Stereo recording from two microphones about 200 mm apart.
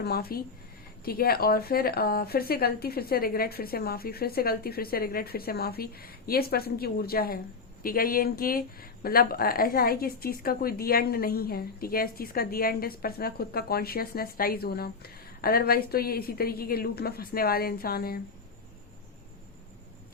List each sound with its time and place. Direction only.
0.0 s speech: 50° left (ahead or behind)